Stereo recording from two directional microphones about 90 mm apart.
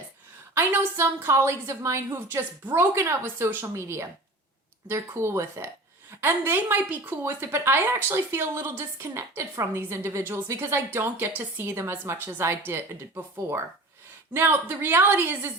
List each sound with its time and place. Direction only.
0.5 s a woman's voice: 25° right (ahead or behind)